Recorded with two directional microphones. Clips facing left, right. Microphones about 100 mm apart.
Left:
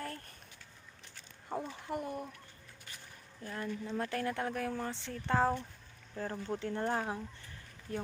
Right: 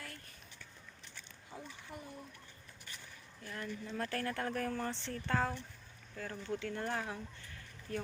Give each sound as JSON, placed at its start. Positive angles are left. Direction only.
{"t": 1.5, "sound": "speech", "side_deg": 60}
{"t": 3.4, "sound": "speech", "side_deg": 25}
{"t": 5.3, "sound": "speech", "side_deg": 30}